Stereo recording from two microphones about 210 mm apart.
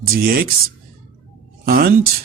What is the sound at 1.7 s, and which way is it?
Speech, 45° right (ahead or behind).